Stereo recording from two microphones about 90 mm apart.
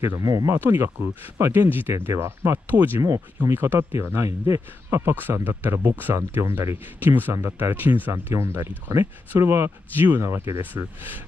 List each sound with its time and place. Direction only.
0.1 s speech: 45° right (ahead or behind)
0.5 s speech: 25° right (ahead or behind)